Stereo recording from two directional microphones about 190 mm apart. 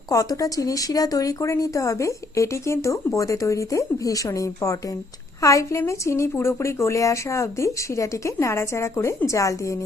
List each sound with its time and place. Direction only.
0.1 s speech: 15° left (ahead or behind)